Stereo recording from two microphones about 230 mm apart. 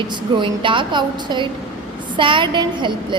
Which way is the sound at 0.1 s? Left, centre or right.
Right.